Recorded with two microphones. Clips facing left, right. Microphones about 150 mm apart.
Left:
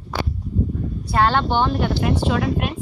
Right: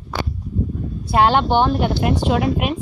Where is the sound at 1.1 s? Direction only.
15° right (ahead or behind).